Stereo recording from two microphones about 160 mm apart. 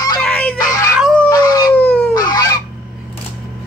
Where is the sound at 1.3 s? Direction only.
25° left (ahead or behind).